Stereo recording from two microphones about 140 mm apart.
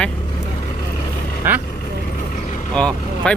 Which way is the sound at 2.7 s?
5° left (ahead or behind).